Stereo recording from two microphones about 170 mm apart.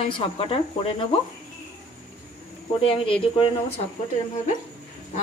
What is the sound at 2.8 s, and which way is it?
Speech, 30° left (ahead or behind).